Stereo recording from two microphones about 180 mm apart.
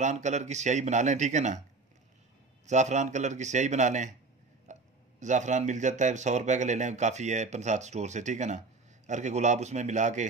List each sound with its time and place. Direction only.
0.0 s speech: 40° right (ahead or behind)
2.6 s speech: 40° right (ahead or behind)
4.7 s a sound: 40° right (ahead or behind)
5.2 s speech: 40° right (ahead or behind)